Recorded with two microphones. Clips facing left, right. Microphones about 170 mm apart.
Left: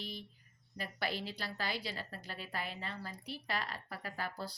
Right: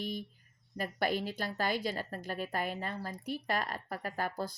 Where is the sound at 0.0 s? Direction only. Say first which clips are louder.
Right 8 dB; 50° right (ahead or behind).